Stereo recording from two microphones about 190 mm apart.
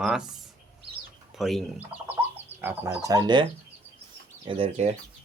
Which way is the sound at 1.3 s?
Centre (ahead or behind).